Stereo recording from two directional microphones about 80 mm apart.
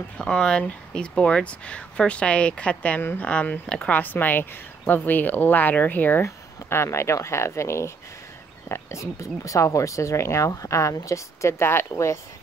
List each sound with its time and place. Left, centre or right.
0.2 s speech: centre
3.0 s speech: left; by 4.0 s centre
4.0 s speech: left
6.2 s speech: left